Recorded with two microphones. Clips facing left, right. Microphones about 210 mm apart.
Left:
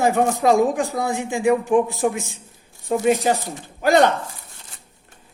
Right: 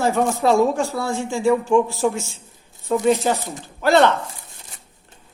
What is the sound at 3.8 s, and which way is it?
Speech, 45° left (ahead or behind).